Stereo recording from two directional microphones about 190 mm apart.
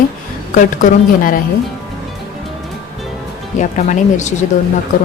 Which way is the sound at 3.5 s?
40° left (ahead or behind).